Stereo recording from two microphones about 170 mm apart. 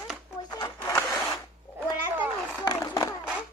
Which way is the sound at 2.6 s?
20° left (ahead or behind).